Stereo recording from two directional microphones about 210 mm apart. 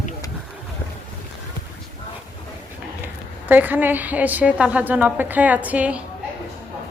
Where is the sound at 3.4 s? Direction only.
10° right (ahead or behind).